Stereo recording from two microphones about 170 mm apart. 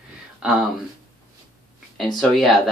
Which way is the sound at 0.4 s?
5° right (ahead or behind).